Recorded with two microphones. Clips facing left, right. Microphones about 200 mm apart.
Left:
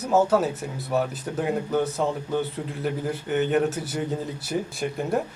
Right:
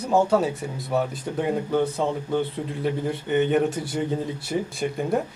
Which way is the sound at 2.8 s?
Centre (ahead or behind).